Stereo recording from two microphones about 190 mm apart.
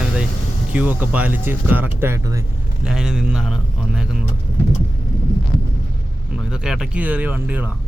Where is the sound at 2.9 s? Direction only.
5° right (ahead or behind).